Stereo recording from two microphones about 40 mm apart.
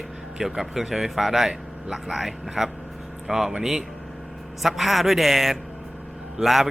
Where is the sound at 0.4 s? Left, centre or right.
Centre.